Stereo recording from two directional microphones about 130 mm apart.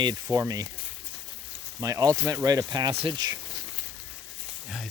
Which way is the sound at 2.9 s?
45° right (ahead or behind).